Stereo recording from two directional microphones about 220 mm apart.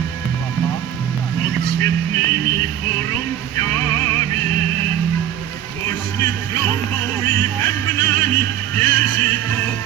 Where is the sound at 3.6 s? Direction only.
15° left (ahead or behind).